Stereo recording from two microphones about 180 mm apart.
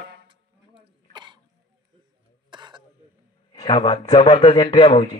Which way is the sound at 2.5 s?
25° right (ahead or behind).